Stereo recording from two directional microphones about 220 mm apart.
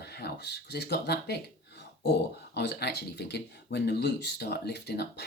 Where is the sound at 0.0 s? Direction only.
50° left (ahead or behind).